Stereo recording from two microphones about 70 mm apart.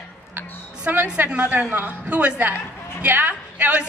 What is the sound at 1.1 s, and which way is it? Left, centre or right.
A woman's voice, centre.